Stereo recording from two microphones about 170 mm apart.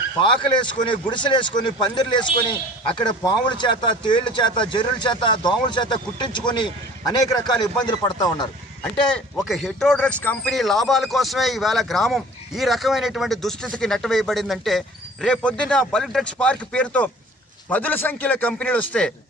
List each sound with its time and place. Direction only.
0.2 s speech: 25° left (ahead or behind)
7.9 s speech: 25° left (ahead or behind)
8.8 s speech: 5° left (ahead or behind)